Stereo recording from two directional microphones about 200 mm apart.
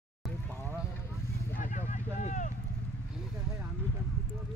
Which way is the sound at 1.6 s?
35° left (ahead or behind).